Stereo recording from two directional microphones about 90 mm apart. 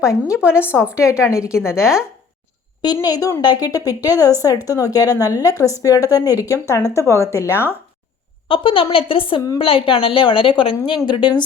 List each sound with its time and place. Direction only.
0.0 s speech: 35° left (ahead or behind)
0.6 s a woman's voice: 15° right (ahead or behind)
1.2 s speech: 35° left (ahead or behind)
1.5 s a woman's voice: 10° right (ahead or behind)
2.8 s a woman's voice: 45° left (ahead or behind); by 7.5 s 30° left (ahead or behind)
8.4 s a woman's voice: 80° left; by 11.4 s 60° left (ahead or behind)